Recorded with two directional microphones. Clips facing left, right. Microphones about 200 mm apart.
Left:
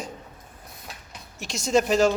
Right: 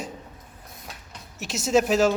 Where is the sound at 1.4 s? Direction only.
5° right (ahead or behind).